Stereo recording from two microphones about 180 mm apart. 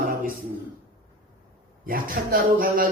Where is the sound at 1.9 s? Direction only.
50° right (ahead or behind).